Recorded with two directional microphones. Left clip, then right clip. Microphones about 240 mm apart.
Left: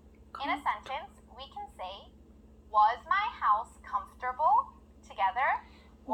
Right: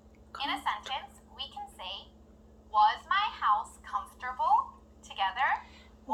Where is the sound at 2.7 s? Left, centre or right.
Left.